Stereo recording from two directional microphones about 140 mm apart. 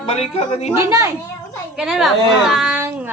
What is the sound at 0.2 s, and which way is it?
Speech, 50° left (ahead or behind).